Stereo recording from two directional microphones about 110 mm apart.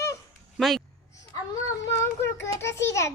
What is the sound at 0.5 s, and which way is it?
Speech, centre (ahead or behind).